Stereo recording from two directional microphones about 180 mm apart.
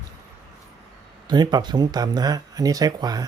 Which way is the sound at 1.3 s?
25° right (ahead or behind).